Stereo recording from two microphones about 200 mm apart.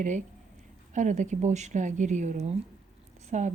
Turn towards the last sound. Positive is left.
turn(degrees=-35)  # may be behind; listen again after turning